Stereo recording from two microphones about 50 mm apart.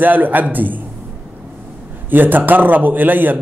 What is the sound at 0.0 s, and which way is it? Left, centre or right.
Speech, right.